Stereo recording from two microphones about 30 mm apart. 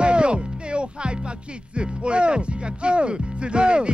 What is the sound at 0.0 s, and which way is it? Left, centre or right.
Music, right.